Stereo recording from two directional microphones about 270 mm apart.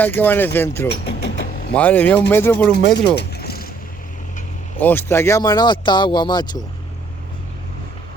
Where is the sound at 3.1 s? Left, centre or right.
Left.